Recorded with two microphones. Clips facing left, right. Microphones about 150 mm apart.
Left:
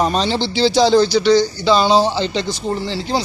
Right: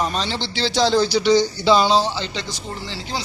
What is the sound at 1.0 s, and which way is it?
Speech, 10° right (ahead or behind).